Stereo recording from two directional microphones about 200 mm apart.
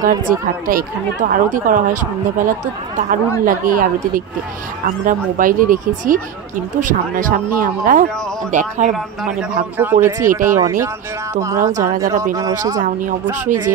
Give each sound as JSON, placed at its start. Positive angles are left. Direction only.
{"t": 0.0, "sound": "speech", "side_deg": -45}
{"t": 9.8, "sound": "speech", "side_deg": -10}
{"t": 12.8, "sound": "speech", "side_deg": -40}